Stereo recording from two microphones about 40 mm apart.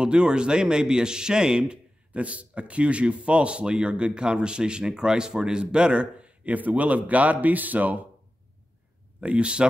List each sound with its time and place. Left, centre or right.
0.0 s speech: right
9.2 s speech: right